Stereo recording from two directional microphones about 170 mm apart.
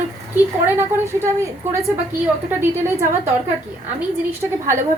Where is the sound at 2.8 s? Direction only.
15° right (ahead or behind).